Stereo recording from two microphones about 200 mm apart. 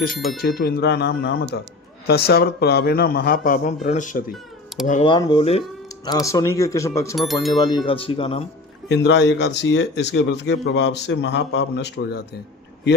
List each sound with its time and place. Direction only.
0.1 s speech: centre (ahead or behind)
0.6 s a man's voice: 55° left (ahead or behind); by 4.2 s 40° left (ahead or behind)
4.7 s speech: centre (ahead or behind)
5.0 s speech: 25° left (ahead or behind)
6.1 s speech: 15° left (ahead or behind)
7.2 s speech: centre (ahead or behind)
7.6 s speech: 20° left (ahead or behind)
8.9 s speech: 60° left (ahead or behind)